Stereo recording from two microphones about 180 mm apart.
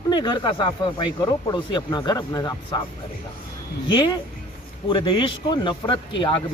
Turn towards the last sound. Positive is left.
turn(degrees=30)  # may be behind; listen again after turning